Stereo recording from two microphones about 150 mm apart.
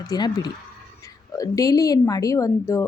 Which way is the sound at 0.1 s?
25° left (ahead or behind).